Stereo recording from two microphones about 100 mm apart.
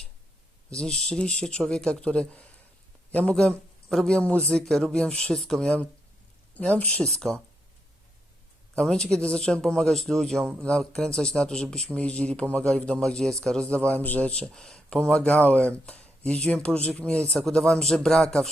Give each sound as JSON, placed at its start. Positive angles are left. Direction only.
{"t": 0.8, "sound": "a man's voice", "side_deg": 5}
{"t": 8.7, "sound": "a man's voice", "side_deg": 5}